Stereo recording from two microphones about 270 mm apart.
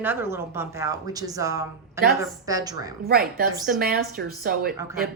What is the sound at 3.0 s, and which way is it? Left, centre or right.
A woman's voice, right.